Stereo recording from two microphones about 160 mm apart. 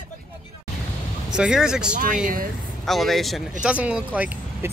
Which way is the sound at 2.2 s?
60° right (ahead or behind).